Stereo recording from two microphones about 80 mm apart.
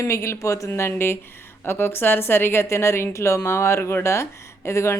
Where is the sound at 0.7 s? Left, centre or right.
Left.